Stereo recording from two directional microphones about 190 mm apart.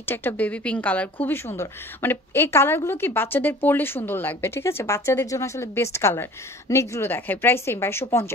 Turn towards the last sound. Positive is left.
turn(degrees=10)  # may be behind; listen again after turning